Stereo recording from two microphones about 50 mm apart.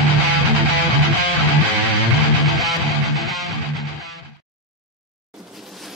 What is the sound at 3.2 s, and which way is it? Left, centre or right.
Music, centre.